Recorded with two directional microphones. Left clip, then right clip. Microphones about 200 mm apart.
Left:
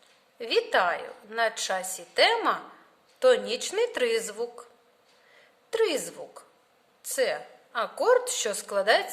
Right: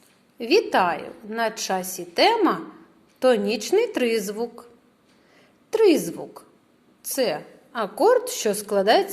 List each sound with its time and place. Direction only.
0.3 s a woman's voice: centre (ahead or behind)
5.7 s a woman's voice: centre (ahead or behind)